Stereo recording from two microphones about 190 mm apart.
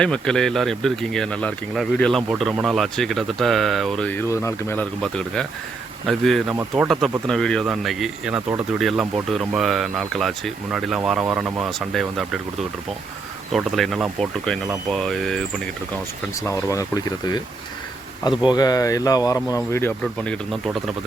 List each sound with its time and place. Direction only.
0.0 s speech: 5° left (ahead or behind)
6.5 s speech: 15° right (ahead or behind)
6.8 s speech: centre (ahead or behind)
13.5 s speech: centre (ahead or behind)
16.5 s speech: 15° left (ahead or behind); by 20.9 s centre (ahead or behind)